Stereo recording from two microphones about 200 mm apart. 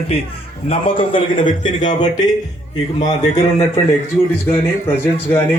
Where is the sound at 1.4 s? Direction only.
35° left (ahead or behind).